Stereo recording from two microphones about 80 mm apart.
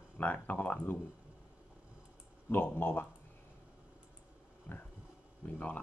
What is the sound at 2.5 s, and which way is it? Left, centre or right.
Speech, left.